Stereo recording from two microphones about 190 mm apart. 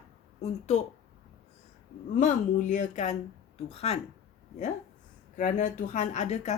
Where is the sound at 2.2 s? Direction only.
40° left (ahead or behind).